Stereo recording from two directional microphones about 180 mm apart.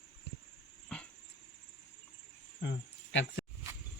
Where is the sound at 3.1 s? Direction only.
85° left.